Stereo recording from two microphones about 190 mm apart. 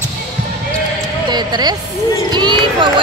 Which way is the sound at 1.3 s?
20° right (ahead or behind).